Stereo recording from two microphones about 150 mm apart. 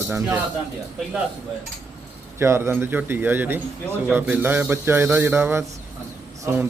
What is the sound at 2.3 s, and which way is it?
A man's voice, 15° right (ahead or behind).